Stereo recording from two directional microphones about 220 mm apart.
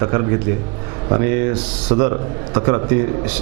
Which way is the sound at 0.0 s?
20° right (ahead or behind).